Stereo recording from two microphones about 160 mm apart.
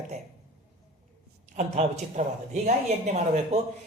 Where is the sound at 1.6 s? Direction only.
45° right (ahead or behind).